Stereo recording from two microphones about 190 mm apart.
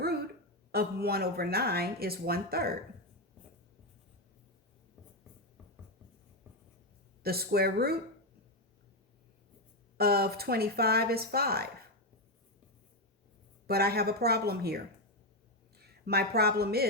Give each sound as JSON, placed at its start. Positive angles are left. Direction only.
{"t": 0.7, "sound": "speech", "side_deg": -55}
{"t": 7.2, "sound": "speech", "side_deg": -55}
{"t": 10.0, "sound": "speech", "side_deg": -55}
{"t": 13.7, "sound": "speech", "side_deg": -55}
{"t": 16.0, "sound": "speech", "side_deg": -55}